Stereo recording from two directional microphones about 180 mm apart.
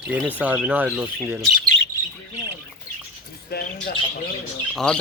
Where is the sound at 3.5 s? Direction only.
60° left (ahead or behind).